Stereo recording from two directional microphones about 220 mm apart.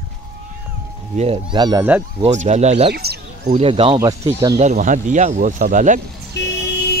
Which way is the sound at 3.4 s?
30° right (ahead or behind).